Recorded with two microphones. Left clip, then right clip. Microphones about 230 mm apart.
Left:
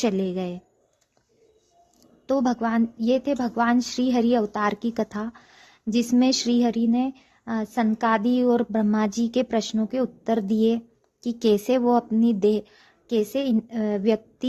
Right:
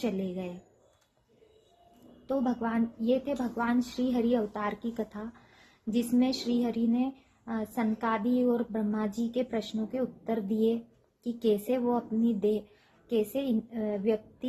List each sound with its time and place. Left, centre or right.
0.0 s a woman's voice: left
2.2 s a woman's voice: left